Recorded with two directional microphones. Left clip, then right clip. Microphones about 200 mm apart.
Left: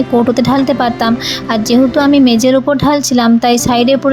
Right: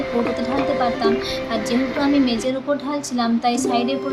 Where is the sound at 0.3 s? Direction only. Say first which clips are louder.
Left 8 dB; 45° left (ahead or behind).